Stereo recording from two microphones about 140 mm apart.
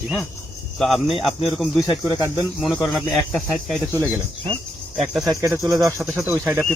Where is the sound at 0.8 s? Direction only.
Centre (ahead or behind).